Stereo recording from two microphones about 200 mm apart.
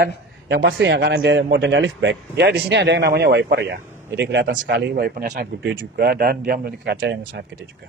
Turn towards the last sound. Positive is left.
turn(degrees=-60)  # may be behind; listen again after turning